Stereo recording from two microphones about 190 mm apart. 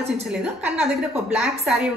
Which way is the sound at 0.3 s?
5° right (ahead or behind).